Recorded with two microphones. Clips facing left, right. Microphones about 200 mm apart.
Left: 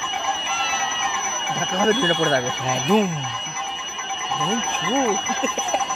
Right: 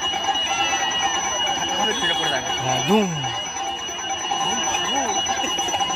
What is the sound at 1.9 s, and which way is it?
Speech, 50° left (ahead or behind).